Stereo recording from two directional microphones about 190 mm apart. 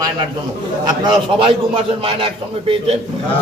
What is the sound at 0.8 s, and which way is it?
A man's voice, 25° right (ahead or behind).